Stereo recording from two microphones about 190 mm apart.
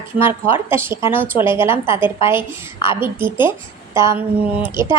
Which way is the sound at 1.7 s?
25° left (ahead or behind).